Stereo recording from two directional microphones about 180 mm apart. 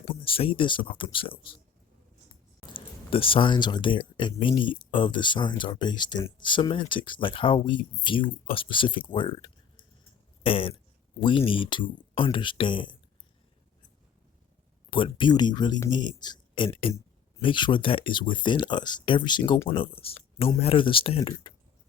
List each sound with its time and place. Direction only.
0.1 s speech: 30° left (ahead or behind)
2.7 s speech: 30° left (ahead or behind)
14.8 s speech: 25° left (ahead or behind)